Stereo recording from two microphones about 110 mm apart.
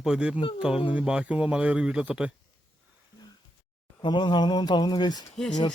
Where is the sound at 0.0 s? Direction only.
10° right (ahead or behind).